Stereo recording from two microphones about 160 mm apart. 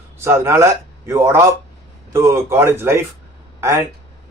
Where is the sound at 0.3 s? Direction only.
15° right (ahead or behind).